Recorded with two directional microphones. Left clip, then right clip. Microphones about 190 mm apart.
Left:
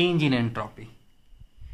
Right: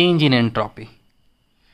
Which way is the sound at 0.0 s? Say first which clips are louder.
Right 7 dB; 40° right (ahead or behind).